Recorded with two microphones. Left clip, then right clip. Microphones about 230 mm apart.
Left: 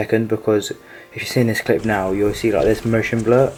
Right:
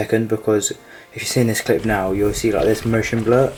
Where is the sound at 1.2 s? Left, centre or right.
Centre.